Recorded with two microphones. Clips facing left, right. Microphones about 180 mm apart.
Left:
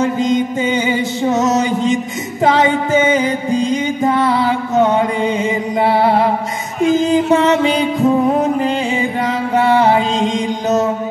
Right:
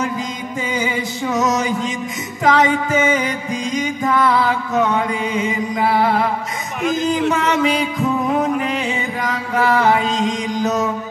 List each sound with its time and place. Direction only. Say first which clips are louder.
0.0 s music: left 9 dB; 25° left (ahead or behind)